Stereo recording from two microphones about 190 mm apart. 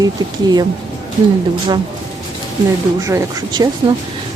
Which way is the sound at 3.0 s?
15° right (ahead or behind).